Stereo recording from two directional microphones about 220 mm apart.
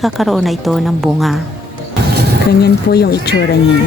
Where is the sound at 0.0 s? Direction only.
Centre (ahead or behind).